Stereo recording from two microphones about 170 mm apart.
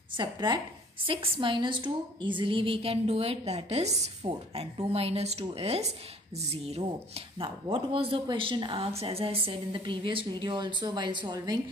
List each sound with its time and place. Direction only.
0.1 s a woman's voice: 25° right (ahead or behind)